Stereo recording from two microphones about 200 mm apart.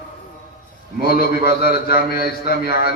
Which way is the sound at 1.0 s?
50° left (ahead or behind).